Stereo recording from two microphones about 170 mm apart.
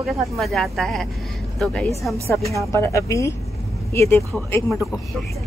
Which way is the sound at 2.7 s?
15° left (ahead or behind).